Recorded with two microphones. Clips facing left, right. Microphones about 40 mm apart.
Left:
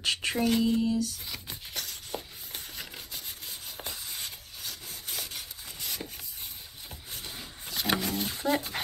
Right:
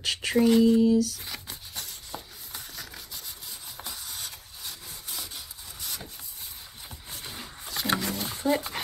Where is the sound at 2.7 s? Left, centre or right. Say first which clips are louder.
Even; left.